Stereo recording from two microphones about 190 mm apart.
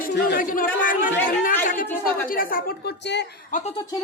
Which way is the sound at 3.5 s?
45° left (ahead or behind).